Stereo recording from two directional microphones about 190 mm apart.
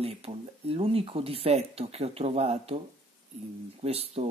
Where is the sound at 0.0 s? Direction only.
30° right (ahead or behind).